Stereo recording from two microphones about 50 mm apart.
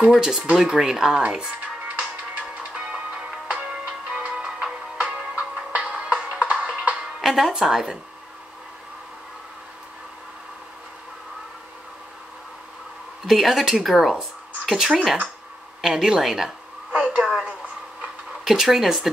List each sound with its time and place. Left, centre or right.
0.0 s speech: centre
2.0 s music: right
7.2 s speech: centre
13.3 s speech: centre
16.9 s a woman's voice: right
17.2 s speech: centre